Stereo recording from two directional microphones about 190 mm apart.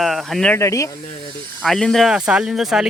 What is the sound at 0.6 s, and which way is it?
Speech, 15° left (ahead or behind).